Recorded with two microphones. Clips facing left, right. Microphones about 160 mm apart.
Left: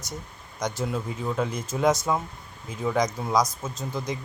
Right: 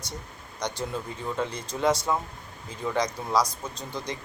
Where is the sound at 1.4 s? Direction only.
10° left (ahead or behind).